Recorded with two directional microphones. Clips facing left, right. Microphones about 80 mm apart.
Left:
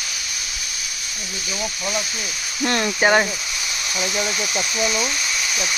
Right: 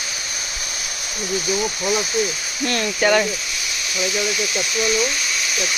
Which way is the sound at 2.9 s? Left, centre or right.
Left.